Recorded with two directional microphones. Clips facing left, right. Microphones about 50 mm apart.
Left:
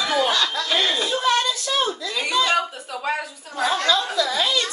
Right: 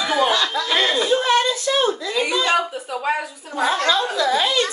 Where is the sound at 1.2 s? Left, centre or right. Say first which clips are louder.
Right 3 dB; right.